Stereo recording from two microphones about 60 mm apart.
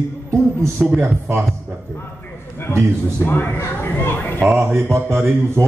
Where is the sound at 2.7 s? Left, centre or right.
Left.